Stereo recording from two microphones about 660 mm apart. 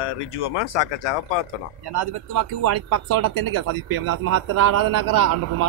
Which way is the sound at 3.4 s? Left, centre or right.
Right.